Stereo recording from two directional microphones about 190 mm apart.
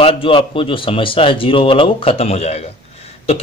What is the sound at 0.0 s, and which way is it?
A man's voice, 30° left (ahead or behind).